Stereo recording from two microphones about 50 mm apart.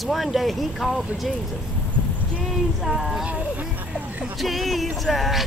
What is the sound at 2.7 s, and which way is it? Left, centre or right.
Speech, centre.